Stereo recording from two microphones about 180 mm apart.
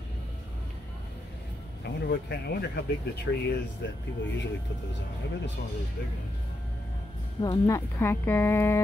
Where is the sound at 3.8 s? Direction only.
65° left (ahead or behind).